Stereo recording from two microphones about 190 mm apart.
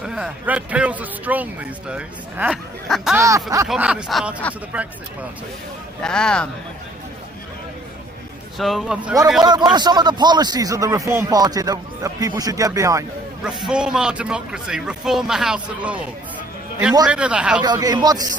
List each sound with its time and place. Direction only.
0.0 s a man's voice: 5° right (ahead or behind)
3.2 s speech: 15° right (ahead or behind)
3.7 s a man's voice: 5° right (ahead or behind)
6.0 s a man's voice: 5° left (ahead or behind)
8.5 s a man's voice: centre (ahead or behind)
9.4 s speech: 20° right (ahead or behind)
13.4 s a man's voice: centre (ahead or behind)
17.1 s a man's voice: 5° right (ahead or behind)
17.6 s speech: 20° right (ahead or behind)